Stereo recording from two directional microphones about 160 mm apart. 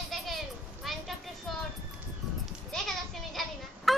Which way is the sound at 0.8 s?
Centre (ahead or behind).